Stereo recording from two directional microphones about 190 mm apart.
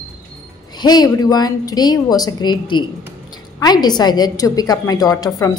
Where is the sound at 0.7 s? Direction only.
20° left (ahead or behind).